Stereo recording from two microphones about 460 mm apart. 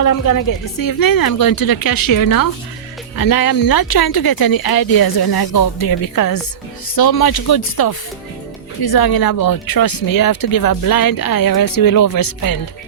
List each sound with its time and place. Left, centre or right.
0.0 s speech: left